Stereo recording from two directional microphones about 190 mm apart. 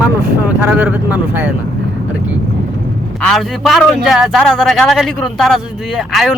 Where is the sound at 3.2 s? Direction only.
Centre (ahead or behind).